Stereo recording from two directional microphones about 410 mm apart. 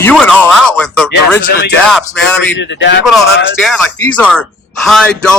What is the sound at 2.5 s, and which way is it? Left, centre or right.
Speech, left.